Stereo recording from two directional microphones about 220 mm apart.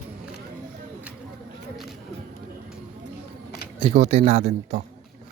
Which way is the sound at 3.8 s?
30° right (ahead or behind).